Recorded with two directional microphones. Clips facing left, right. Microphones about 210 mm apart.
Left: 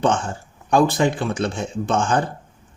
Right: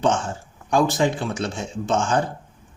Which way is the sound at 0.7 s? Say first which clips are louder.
Left 2 dB; 55° left (ahead or behind).